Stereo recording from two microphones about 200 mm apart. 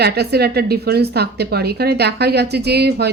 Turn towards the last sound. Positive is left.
turn(degrees=-55)  # may be behind; listen again after turning